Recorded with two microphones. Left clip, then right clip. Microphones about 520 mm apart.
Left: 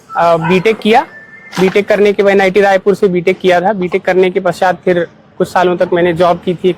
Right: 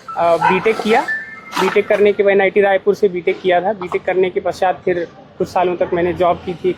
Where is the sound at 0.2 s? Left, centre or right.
Left.